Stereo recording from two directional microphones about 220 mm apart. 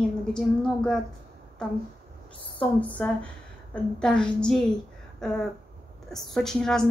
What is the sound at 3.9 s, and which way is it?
Speech, 5° left (ahead or behind).